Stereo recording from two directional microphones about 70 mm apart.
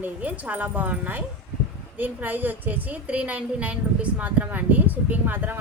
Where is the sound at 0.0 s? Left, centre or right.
Right.